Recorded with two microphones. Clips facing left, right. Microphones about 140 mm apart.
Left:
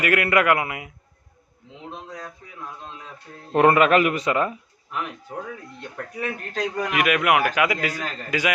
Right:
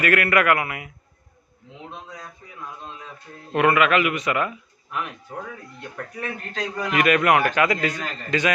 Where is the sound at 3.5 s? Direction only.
35° left (ahead or behind).